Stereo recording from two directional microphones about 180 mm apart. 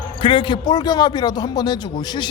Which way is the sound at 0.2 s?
30° left (ahead or behind).